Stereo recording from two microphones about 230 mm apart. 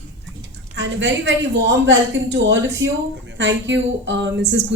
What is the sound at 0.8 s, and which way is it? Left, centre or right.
Speech, right.